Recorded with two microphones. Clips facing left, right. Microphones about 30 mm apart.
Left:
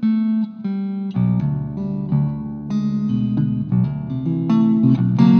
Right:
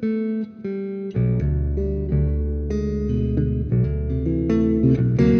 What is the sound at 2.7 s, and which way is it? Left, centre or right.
Music, left.